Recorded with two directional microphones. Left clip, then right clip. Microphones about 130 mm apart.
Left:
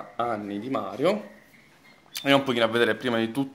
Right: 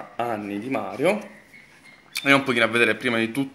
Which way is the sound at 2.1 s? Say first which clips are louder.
Right 3 dB; 10° left (ahead or behind).